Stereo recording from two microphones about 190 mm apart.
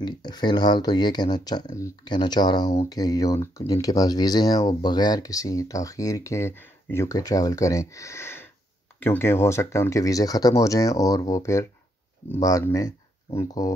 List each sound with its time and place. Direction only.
0.0 s speech: 20° left (ahead or behind)